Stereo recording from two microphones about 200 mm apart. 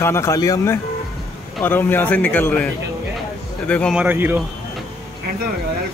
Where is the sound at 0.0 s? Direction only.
15° left (ahead or behind).